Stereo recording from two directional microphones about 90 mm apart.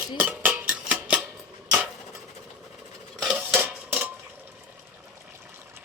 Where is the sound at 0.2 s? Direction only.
20° right (ahead or behind).